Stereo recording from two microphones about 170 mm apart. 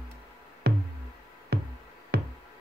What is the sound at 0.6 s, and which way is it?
Music, 70° right (ahead or behind).